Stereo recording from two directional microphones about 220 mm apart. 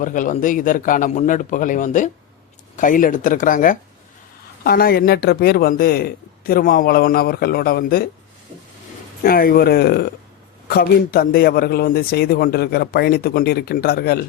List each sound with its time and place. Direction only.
0.0 s a man's voice: 35° left (ahead or behind)
9.2 s a man's voice: 40° left (ahead or behind)